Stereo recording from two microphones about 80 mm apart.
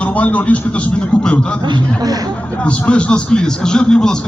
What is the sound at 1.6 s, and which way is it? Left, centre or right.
Speech, right.